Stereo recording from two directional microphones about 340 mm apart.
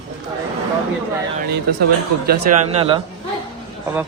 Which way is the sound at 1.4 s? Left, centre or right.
Right.